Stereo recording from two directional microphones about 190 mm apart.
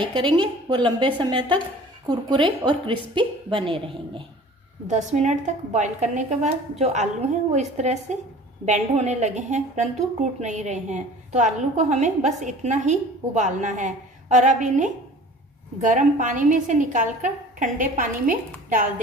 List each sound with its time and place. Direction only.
0.0 s a woman's voice: 25° right (ahead or behind)
4.8 s a woman's voice: 40° right (ahead or behind)